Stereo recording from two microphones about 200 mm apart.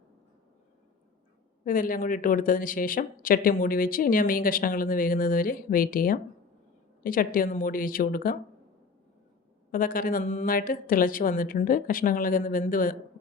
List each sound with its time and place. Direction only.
1.6 s speech: 45° left (ahead or behind)
9.7 s speech: 45° left (ahead or behind)